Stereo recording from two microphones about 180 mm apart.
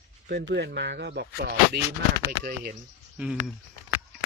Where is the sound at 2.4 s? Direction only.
55° right (ahead or behind).